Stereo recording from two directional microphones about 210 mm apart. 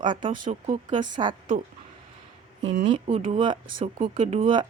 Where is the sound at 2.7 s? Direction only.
35° right (ahead or behind).